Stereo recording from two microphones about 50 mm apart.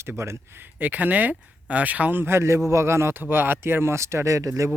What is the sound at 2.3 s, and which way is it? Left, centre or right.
A man's voice, right.